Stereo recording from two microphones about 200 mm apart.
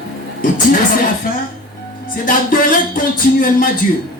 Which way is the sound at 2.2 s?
45° left (ahead or behind).